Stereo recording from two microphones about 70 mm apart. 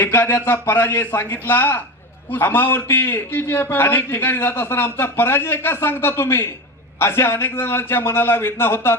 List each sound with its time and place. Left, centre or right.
0.0 s a man's voice: left